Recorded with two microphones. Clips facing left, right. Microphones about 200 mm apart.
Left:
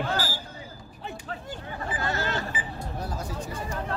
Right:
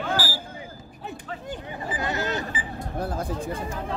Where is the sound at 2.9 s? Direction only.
55° right (ahead or behind).